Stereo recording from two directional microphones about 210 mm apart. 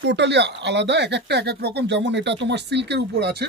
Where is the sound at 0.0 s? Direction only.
55° right (ahead or behind).